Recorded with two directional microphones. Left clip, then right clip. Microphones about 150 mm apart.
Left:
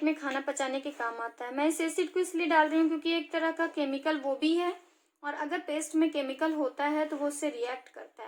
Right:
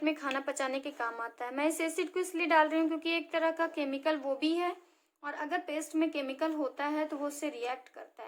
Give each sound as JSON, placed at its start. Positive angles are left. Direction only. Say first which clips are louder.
{"t": 0.0, "sound": "a woman's voice", "louder": "left 2 dB", "side_deg": 40}